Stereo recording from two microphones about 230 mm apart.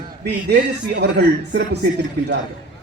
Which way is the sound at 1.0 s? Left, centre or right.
Right.